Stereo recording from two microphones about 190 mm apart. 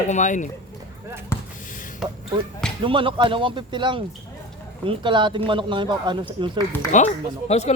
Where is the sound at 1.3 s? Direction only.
15° left (ahead or behind).